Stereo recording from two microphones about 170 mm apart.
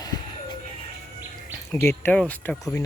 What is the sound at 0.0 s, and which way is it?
Music, 20° left (ahead or behind).